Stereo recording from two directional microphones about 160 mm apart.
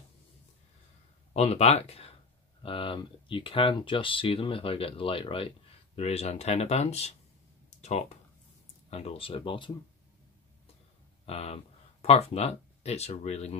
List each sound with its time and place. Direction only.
1.3 s speech: 40° left (ahead or behind)
11.2 s speech: 40° left (ahead or behind)